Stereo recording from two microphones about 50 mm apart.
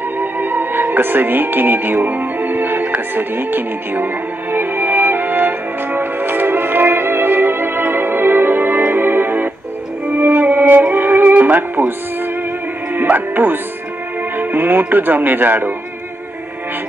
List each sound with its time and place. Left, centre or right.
0.2 s music: right
12.9 s music: right
14.3 s speech: right